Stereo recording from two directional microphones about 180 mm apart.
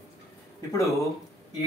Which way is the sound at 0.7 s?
15° left (ahead or behind).